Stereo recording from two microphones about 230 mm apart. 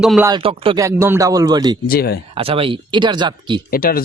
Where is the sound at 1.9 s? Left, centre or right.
Left.